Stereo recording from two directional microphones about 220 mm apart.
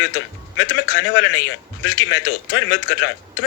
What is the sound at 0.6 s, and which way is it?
Speech, 55° left (ahead or behind).